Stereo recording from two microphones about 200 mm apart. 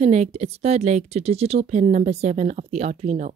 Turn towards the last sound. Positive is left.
turn(degrees=-35)  # may be behind; listen again after turning